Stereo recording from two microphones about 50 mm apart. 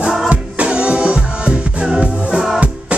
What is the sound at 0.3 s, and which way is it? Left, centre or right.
Music, right.